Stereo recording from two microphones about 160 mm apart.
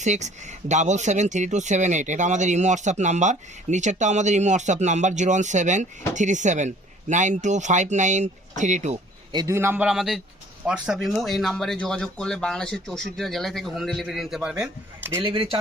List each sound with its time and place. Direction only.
0.0 s speech: 45° right (ahead or behind)
9.3 s a man's voice: 20° right (ahead or behind); by 15.1 s 5° right (ahead or behind)
15.2 s speech: 35° right (ahead or behind)